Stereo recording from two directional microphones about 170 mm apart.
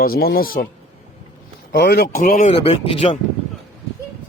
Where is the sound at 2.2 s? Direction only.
50° left (ahead or behind).